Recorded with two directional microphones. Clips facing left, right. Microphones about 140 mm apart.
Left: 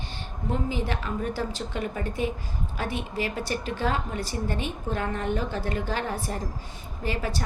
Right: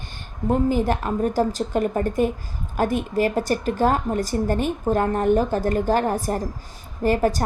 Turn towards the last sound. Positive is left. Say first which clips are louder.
# right 10 dB
turn(degrees=-45)  # may be behind; listen again after turning